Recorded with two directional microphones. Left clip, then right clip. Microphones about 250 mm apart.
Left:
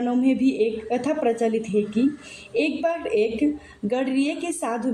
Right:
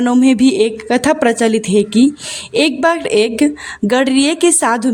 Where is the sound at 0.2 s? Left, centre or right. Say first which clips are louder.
Right 9 dB; right.